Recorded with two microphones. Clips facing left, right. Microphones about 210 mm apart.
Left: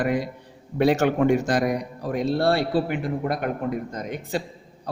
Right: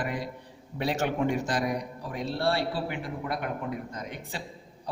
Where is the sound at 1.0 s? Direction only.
75° left (ahead or behind).